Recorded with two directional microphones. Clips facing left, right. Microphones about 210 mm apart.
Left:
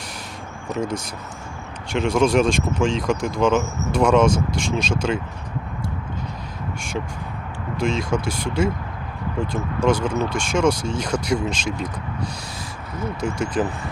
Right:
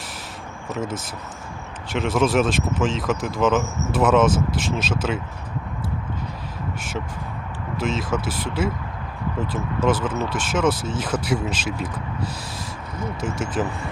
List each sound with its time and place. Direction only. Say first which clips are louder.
0.7 s speech: left 3 dB; 5° right (ahead or behind)
7.8 s speech: left 2 dB; 5° right (ahead or behind)